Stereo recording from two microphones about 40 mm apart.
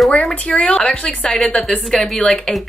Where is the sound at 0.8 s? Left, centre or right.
Left.